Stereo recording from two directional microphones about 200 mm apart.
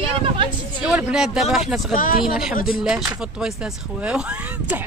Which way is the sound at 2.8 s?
5° right (ahead or behind).